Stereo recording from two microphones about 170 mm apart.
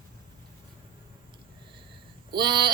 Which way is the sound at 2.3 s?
25° right (ahead or behind).